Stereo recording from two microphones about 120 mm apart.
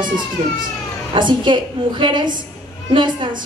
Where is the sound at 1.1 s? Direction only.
40° right (ahead or behind).